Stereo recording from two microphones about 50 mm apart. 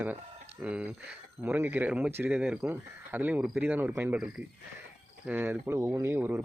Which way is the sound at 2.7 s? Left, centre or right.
Right.